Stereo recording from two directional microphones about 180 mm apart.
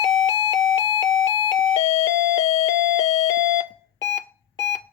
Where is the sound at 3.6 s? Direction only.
15° left (ahead or behind).